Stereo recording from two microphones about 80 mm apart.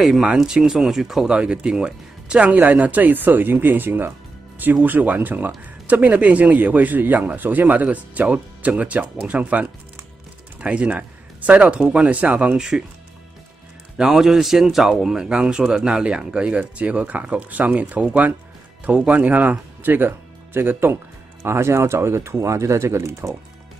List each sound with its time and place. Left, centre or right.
0.0 s speech: centre
12.5 s speech: centre
13.9 s speech: centre; by 23.3 s right